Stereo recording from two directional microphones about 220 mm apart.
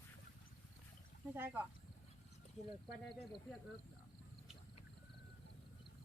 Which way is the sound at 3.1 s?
Centre (ahead or behind).